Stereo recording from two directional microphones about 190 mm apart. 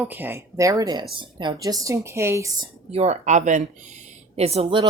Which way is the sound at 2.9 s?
35° right (ahead or behind).